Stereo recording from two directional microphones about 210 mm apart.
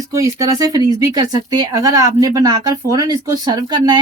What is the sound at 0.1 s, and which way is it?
Speech, 15° right (ahead or behind).